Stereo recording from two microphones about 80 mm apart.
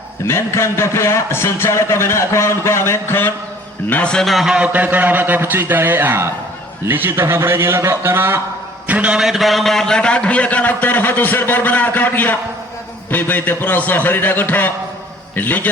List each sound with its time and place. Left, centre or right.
0.3 s a man's voice: left
4.1 s a man's voice: centre
4.5 s a man's voice: centre
8.9 s a man's voice: centre; by 15.7 s left